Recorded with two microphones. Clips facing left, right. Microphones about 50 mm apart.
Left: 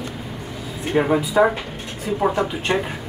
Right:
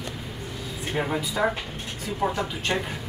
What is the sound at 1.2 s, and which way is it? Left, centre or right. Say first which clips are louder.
Speech: left 8 dB; centre.